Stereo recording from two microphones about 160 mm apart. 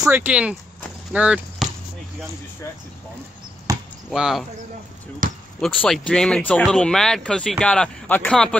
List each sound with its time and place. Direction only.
0.0 s speech: 15° right (ahead or behind)
3.7 s chop: 20° right (ahead or behind)
4.1 s speech: centre (ahead or behind)
5.2 s speech: 55° right (ahead or behind)
5.6 s speech: 5° left (ahead or behind)